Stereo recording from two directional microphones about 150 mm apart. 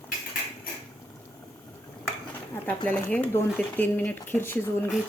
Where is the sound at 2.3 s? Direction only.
15° left (ahead or behind).